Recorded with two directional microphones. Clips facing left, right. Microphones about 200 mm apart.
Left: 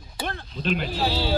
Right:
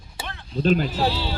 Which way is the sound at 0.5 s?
40° right (ahead or behind).